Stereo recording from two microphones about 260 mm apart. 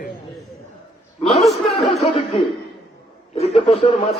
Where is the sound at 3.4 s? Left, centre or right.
Left.